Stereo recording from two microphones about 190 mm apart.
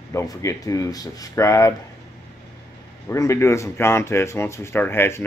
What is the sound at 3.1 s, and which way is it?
Speech, 15° left (ahead or behind).